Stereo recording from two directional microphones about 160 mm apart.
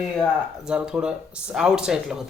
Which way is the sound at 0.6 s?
5° right (ahead or behind).